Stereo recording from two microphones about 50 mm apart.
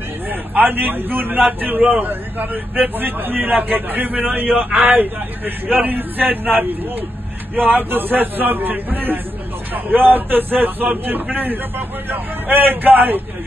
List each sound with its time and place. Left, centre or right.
0.3 s a man's voice: right